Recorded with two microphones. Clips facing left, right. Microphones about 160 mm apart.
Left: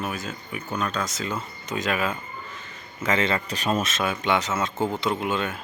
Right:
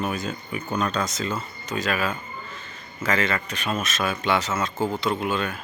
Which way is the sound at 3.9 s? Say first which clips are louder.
Even; 20° left (ahead or behind).